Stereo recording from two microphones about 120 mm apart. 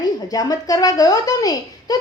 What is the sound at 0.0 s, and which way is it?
A woman's voice, 30° left (ahead or behind).